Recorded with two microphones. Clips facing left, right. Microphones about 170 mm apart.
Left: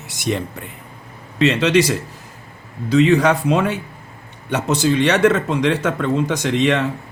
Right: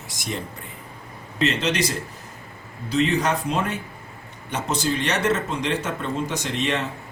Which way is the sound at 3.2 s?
75° left (ahead or behind).